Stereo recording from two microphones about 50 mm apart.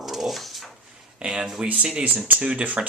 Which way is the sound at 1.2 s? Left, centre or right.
Right.